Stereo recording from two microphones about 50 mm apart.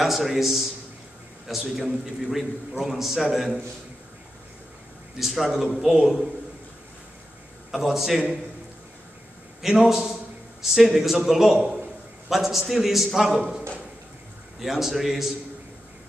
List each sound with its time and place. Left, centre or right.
0.0 s a man's voice: centre
5.2 s a man's voice: centre
7.7 s a man's voice: centre
9.6 s a man's voice: centre
13.4 s a man's voice: centre
14.6 s a man's voice: centre